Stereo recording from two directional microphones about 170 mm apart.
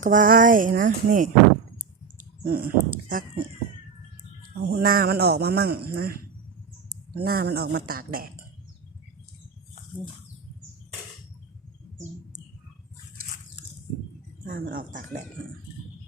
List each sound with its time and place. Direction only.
0.0 s speech: 50° right (ahead or behind)
2.1 s speech: 65° right (ahead or behind)
4.7 s speech: 60° right (ahead or behind)
7.2 s speech: 65° right (ahead or behind)
14.4 s speech: 55° right (ahead or behind)